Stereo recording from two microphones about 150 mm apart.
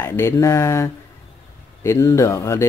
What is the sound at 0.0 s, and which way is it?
Speech, 15° left (ahead or behind).